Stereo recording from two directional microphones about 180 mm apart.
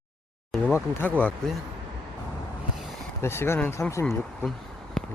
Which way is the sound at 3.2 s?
15° left (ahead or behind).